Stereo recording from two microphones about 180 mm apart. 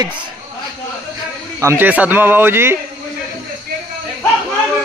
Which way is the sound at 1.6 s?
15° right (ahead or behind).